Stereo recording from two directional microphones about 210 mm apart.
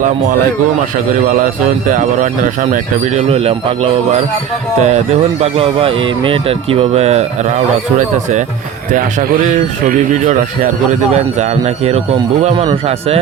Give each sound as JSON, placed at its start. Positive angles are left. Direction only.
{"t": 1.9, "sound": "speech", "side_deg": -35}
{"t": 4.8, "sound": "speech", "side_deg": -30}
{"t": 9.5, "sound": "speech", "side_deg": -35}